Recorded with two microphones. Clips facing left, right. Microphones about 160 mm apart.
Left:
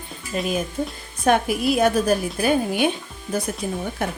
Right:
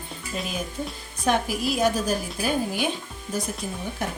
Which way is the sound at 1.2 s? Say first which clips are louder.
Left 5 dB; 60° left (ahead or behind).